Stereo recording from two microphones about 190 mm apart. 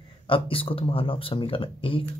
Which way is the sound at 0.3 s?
30° left (ahead or behind).